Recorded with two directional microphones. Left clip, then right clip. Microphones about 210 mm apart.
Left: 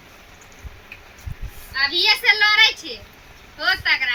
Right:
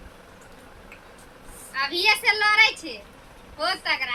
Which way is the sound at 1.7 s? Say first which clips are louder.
Left 4 dB; centre (ahead or behind).